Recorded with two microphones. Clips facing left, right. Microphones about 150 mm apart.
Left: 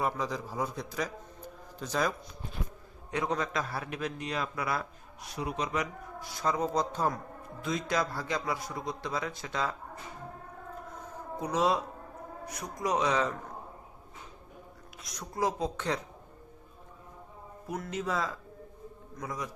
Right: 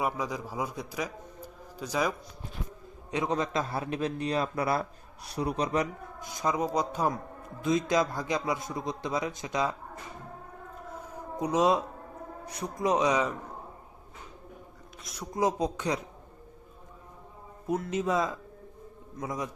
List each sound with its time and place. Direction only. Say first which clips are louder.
0.0 s a man's voice: right 1 dB; 10° right (ahead or behind); by 5.9 s 35° right (ahead or behind)
6.1 s a man's voice: right 1 dB; 20° right (ahead or behind)
11.1 s a sound: right 4 dB; 20° right (ahead or behind)
12.5 s a man's voice: right 4 dB; 30° right (ahead or behind)
15.0 s speech: right 3 dB; centre (ahead or behind)
15.4 s speech: right 3 dB; 20° right (ahead or behind)
17.7 s a man's voice: right 5 dB; 25° right (ahead or behind)